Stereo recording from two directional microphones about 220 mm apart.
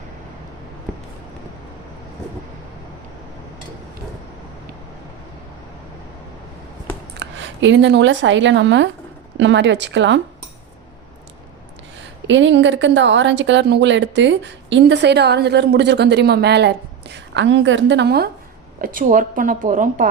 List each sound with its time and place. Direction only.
7.2 s speech: 55° right (ahead or behind)
12.3 s speech: 55° right (ahead or behind)
18.8 s a woman's voice: 40° right (ahead or behind)